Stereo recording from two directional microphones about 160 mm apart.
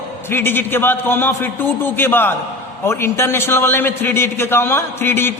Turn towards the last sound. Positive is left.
turn(degrees=15)  # may be behind; listen again after turning